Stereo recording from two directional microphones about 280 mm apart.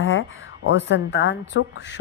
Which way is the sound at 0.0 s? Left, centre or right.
Left.